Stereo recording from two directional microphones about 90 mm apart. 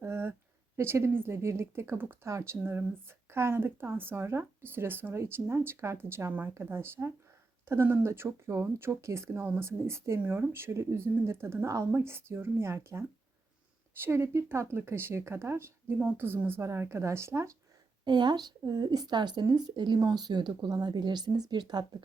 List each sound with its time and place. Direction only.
0.0 s a sound: 25° right (ahead or behind)
0.8 s a woman's voice: 30° right (ahead or behind)
18.0 s speech: 55° right (ahead or behind)